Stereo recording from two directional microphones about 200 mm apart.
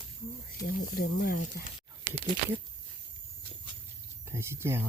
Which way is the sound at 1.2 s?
45° left (ahead or behind).